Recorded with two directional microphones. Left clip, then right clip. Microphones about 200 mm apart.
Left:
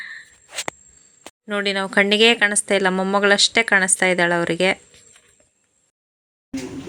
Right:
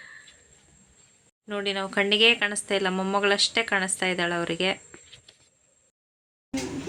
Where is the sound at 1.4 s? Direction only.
35° left (ahead or behind).